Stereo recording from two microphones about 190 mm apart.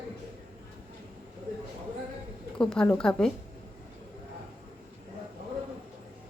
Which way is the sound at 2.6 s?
5° left (ahead or behind).